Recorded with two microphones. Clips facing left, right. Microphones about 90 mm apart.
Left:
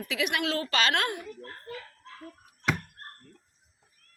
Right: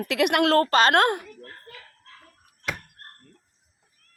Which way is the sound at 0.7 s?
45° right (ahead or behind).